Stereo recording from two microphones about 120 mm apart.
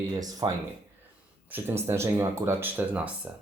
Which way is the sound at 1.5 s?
20° right (ahead or behind).